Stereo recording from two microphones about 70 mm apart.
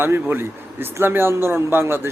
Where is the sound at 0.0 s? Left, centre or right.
Right.